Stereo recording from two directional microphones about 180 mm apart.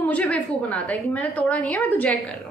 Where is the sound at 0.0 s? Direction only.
5° left (ahead or behind).